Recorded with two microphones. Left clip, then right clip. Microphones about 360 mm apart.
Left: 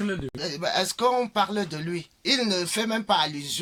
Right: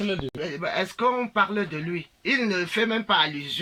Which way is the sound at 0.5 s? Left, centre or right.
Centre.